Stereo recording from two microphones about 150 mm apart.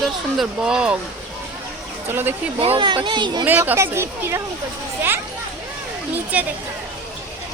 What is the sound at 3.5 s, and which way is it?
Speech, 10° right (ahead or behind).